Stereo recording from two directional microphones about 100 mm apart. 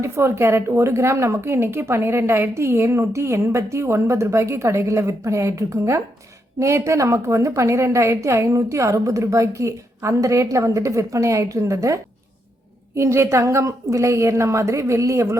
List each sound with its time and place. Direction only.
0.0 s a woman's voice: 25° right (ahead or behind)